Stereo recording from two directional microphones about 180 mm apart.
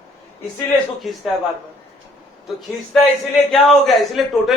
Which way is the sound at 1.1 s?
Centre (ahead or behind).